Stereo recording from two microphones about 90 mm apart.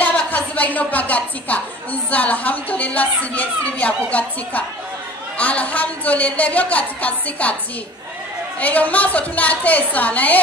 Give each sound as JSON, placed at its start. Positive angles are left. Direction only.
{"t": 0.0, "sound": "a woman's voice", "side_deg": 20}
{"t": 8.5, "sound": "a woman's voice", "side_deg": 15}